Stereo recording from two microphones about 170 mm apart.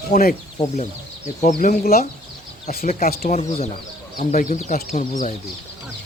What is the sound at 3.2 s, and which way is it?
Speech, 40° left (ahead or behind).